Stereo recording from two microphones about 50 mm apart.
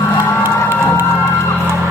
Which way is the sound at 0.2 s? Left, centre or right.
Right.